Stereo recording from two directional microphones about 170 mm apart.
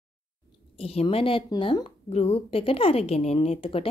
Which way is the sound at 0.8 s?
35° left (ahead or behind).